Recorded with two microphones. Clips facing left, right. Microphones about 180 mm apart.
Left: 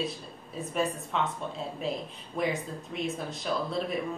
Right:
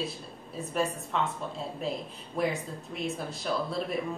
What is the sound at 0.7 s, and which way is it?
Speech, centre (ahead or behind).